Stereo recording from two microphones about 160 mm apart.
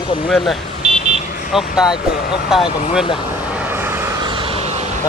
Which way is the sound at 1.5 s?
Centre (ahead or behind).